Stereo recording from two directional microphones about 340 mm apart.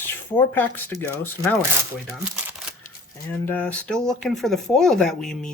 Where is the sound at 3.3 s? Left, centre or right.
Centre.